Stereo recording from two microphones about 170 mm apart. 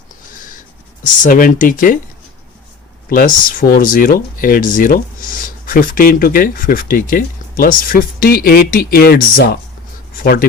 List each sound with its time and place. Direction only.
1.0 s speech: 50° left (ahead or behind)
3.1 s speech: 50° left (ahead or behind)